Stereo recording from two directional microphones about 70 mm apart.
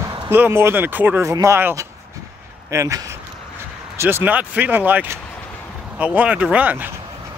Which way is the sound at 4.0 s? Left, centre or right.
Right.